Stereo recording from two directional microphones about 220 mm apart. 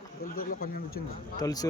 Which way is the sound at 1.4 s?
15° left (ahead or behind).